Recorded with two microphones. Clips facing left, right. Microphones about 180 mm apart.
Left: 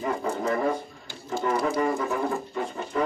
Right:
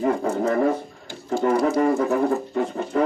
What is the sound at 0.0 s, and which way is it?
Speech, 45° right (ahead or behind).